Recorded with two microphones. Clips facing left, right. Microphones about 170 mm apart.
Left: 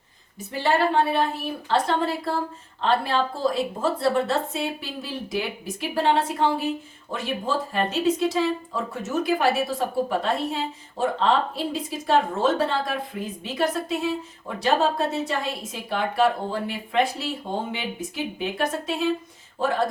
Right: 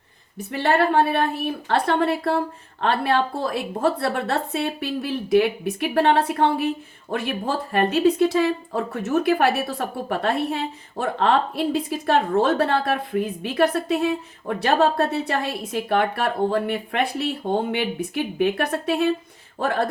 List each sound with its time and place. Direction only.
0.3 s speech: 60° right (ahead or behind)